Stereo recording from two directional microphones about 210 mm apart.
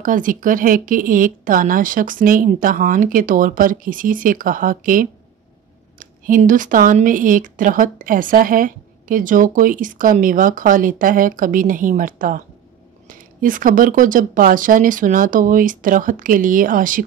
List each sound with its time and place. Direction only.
0.0 s speech: 40° right (ahead or behind)